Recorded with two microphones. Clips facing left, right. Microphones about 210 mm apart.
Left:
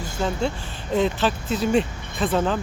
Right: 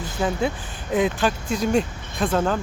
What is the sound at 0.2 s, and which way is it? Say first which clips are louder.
Speech: right 1 dB; 5° right (ahead or behind).